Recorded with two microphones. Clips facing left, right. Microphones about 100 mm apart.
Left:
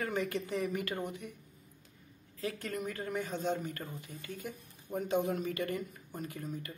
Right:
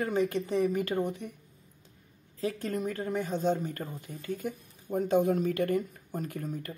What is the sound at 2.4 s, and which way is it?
Speech, 30° right (ahead or behind).